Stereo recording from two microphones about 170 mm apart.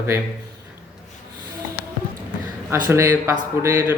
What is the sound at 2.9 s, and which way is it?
Speech, 15° right (ahead or behind).